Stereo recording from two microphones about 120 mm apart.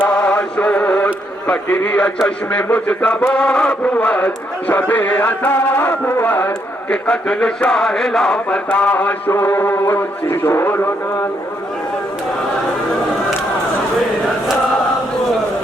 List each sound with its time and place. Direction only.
0.0 s speech: 10° left (ahead or behind)
4.7 s chant: 15° left (ahead or behind)
9.3 s music: 15° left (ahead or behind)